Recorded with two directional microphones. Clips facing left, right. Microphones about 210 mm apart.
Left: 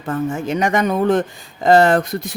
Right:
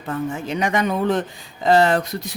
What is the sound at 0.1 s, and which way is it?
Speech, 45° left (ahead or behind).